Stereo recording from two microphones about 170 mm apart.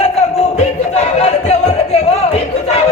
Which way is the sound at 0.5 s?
40° left (ahead or behind).